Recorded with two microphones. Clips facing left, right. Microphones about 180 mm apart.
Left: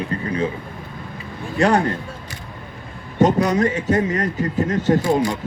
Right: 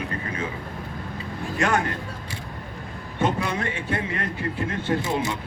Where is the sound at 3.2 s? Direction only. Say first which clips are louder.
Left 9 dB; 40° left (ahead or behind).